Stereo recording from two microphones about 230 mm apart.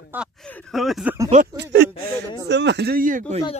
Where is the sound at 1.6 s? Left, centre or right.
Right.